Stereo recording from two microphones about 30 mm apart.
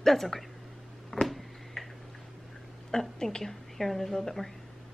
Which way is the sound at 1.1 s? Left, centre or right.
Centre.